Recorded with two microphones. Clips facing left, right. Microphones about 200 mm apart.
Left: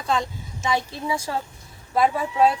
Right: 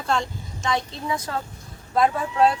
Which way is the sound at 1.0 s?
30° left (ahead or behind).